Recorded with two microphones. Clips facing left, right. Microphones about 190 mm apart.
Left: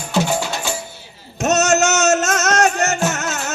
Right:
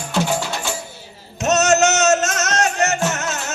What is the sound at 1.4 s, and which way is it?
Music, 50° left (ahead or behind).